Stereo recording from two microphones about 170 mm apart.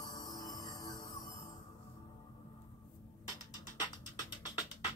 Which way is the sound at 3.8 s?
25° left (ahead or behind).